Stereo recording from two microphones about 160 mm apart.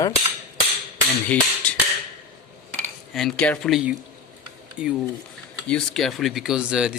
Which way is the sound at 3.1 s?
5° left (ahead or behind).